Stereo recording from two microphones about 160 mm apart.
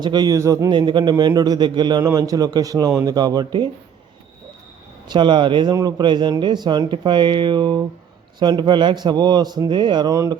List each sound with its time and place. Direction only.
0.0 s a man's voice: 25° right (ahead or behind)
5.0 s a man's voice: 30° right (ahead or behind)